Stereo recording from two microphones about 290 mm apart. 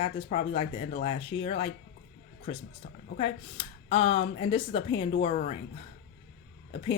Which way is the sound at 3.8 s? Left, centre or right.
Centre.